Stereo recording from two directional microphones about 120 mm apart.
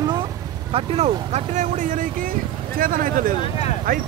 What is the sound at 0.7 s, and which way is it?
Speech, 55° right (ahead or behind).